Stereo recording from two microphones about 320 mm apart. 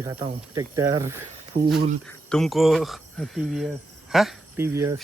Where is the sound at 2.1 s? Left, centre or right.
Centre.